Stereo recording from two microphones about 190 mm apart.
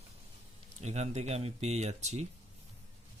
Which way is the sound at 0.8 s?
35° right (ahead or behind).